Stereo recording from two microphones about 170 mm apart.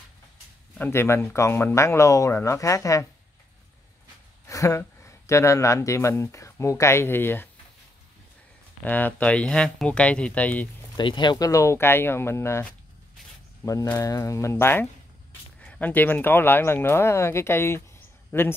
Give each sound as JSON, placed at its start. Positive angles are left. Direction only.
{"t": 0.7, "sound": "speech", "side_deg": 10}
{"t": 4.5, "sound": "speech", "side_deg": 20}
{"t": 8.8, "sound": "speech", "side_deg": 10}
{"t": 11.0, "sound": "speech", "side_deg": 25}